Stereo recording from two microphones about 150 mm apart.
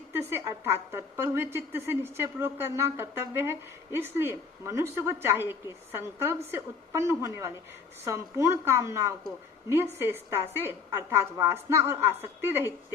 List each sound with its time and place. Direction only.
0.1 s a woman's voice: 15° right (ahead or behind)